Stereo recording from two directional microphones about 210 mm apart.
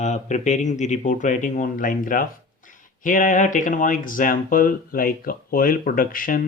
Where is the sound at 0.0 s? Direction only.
35° left (ahead or behind).